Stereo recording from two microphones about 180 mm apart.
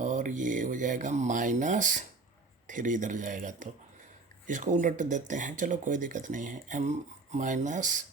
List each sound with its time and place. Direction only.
0.0 s speech: 45° right (ahead or behind)